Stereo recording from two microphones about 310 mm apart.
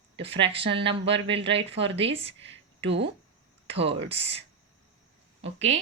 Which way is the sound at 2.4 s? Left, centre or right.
Right.